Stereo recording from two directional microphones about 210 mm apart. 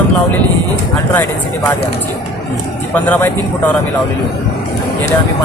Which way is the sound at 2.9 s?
10° left (ahead or behind).